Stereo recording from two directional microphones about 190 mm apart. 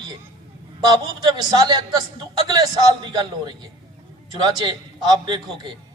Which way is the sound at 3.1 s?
20° right (ahead or behind).